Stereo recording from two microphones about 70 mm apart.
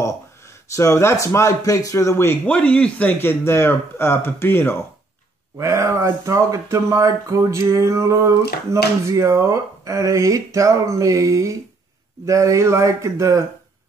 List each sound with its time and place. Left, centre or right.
0.0 s speech: left
2.4 s speech: centre
3.2 s speech: left
5.6 s speech: right